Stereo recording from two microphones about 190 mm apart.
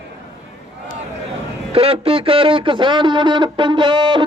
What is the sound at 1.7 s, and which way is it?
Speech, 30° right (ahead or behind).